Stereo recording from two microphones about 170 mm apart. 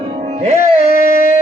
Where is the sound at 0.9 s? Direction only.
55° left (ahead or behind).